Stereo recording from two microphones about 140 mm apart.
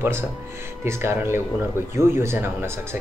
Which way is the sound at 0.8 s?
20° right (ahead or behind).